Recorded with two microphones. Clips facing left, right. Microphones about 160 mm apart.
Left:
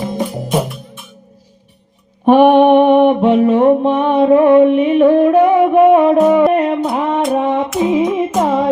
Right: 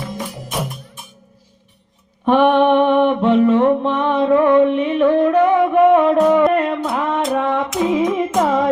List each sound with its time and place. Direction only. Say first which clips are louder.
0.3 s music: left 9 dB; 30° left (ahead or behind)
2.2 s mantra: left 5 dB; 10° left (ahead or behind)
3.2 s a sound: left 2 dB; 10° left (ahead or behind)
4.6 s music: left 5 dB; 15° left (ahead or behind)
6.5 s a sound: left 4 dB; 20° left (ahead or behind)
7.3 s female singing: left 3 dB; 20° left (ahead or behind)
7.8 s music: left 2 dB; 15° left (ahead or behind)